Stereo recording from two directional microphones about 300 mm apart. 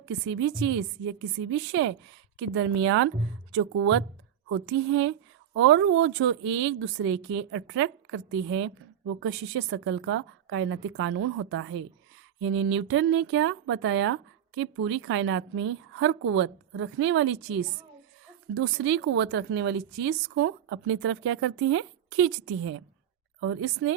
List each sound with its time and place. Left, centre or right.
0.0 s speech: right